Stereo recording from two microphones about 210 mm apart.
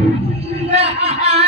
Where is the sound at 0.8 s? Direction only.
30° right (ahead or behind).